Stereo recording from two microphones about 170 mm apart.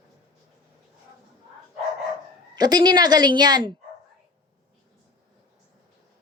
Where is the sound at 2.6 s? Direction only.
25° right (ahead or behind).